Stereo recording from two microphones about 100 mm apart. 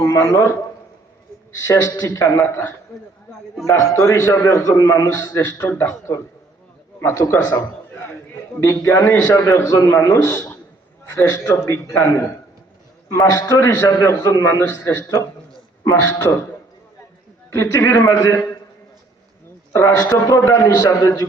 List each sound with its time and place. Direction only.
0.0 s speech: 30° left (ahead or behind)
1.6 s a man's voice: 30° left (ahead or behind)
2.5 s a man's voice: 20° left (ahead or behind)
3.7 s a man's voice: 30° left (ahead or behind)
5.4 s a man's voice: 25° left (ahead or behind)
8.6 s a man's voice: 30° left (ahead or behind)
13.1 s a man's voice: 35° left (ahead or behind)
17.5 s a man's voice: 30° left (ahead or behind)
19.7 s a man's voice: 30° left (ahead or behind)